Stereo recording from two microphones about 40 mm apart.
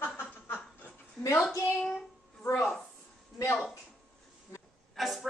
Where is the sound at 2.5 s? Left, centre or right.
Centre.